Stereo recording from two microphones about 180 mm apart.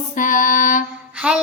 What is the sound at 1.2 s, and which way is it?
Child singing, 5° right (ahead or behind).